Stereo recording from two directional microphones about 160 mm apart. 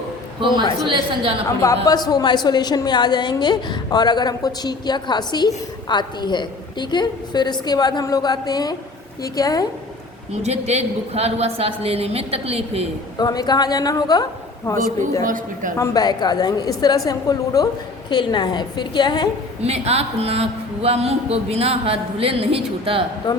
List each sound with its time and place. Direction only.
0.3 s a man's voice: 30° right (ahead or behind)
1.5 s a woman's voice: 20° left (ahead or behind)
10.3 s speech: 40° right (ahead or behind)
13.1 s a woman's voice: 25° left (ahead or behind)
14.8 s a woman's voice: 55° right (ahead or behind)
15.8 s a woman's voice: 20° left (ahead or behind)
19.6 s speech: 40° right (ahead or behind)
23.3 s speech: 25° left (ahead or behind)